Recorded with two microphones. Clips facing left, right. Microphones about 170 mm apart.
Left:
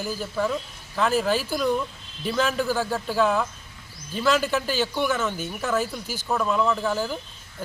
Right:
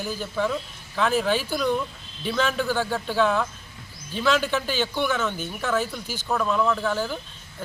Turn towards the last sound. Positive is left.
turn(degrees=5)  # may be behind; listen again after turning